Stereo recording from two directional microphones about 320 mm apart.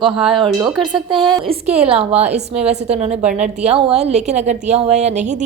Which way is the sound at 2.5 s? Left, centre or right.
Centre.